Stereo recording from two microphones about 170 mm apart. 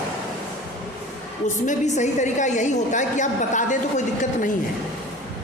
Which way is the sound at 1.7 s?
45° left (ahead or behind).